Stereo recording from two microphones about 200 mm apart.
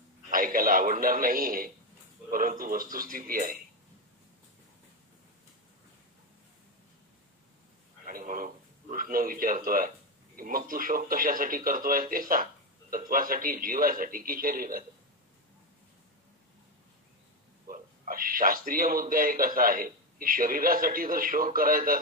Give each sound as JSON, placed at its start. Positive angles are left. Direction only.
{"t": 0.3, "sound": "a man's voice", "side_deg": -45}
{"t": 8.0, "sound": "a sound", "side_deg": -40}
{"t": 8.9, "sound": "a man's voice", "side_deg": -45}
{"t": 17.6, "sound": "a man's voice", "side_deg": -45}